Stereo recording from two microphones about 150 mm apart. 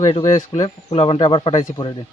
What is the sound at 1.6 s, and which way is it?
Speech, 25° left (ahead or behind).